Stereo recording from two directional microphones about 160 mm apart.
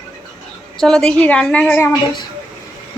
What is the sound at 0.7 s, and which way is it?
A woman's voice, 5° left (ahead or behind).